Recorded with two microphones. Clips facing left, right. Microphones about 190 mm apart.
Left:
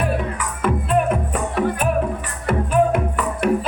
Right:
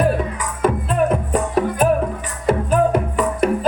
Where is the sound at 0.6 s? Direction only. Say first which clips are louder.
Right 1 dB; 40° right (ahead or behind).